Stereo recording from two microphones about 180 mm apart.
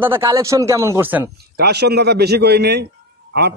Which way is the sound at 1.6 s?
65° right (ahead or behind).